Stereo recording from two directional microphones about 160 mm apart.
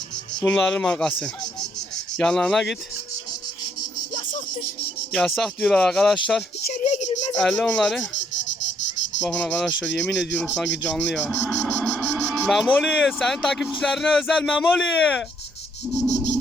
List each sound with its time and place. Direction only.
0.4 s speech: 5° left (ahead or behind)
2.1 s speech: 5° left (ahead or behind)
5.1 s speech: centre (ahead or behind)
6.7 s a sound: 50° left (ahead or behind)
7.3 s speech: centre (ahead or behind)
9.2 s cricket: 10° left (ahead or behind)
10.8 s a sound: 5° left (ahead or behind)
12.3 s speech: centre (ahead or behind)
16.0 s insect: centre (ahead or behind)